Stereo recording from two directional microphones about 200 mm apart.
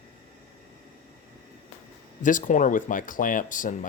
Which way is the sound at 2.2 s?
40° left (ahead or behind).